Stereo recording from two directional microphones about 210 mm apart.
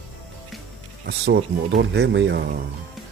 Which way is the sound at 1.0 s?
50° right (ahead or behind).